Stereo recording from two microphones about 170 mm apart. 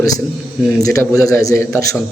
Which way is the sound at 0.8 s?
20° left (ahead or behind).